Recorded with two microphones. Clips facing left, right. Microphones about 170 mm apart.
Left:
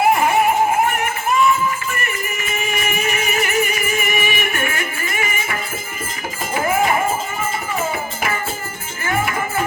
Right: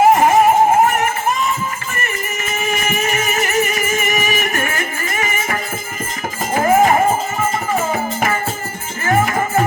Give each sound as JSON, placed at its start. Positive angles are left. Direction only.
{"t": 0.0, "sound": "music", "side_deg": -40}
{"t": 0.9, "sound": "a sound", "side_deg": -40}
{"t": 2.5, "sound": "music", "side_deg": -35}
{"t": 9.0, "sound": "music", "side_deg": -40}